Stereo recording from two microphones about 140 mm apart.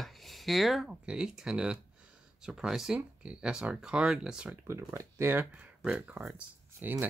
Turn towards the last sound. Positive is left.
turn(degrees=-10)  # may be behind; listen again after turning